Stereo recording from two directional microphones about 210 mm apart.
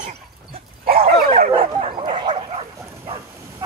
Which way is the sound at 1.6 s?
25° right (ahead or behind).